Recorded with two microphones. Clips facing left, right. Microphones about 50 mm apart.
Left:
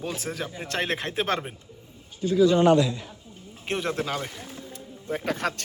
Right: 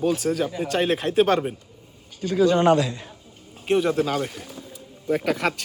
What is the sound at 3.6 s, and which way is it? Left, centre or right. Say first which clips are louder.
Speech: right 8 dB; centre.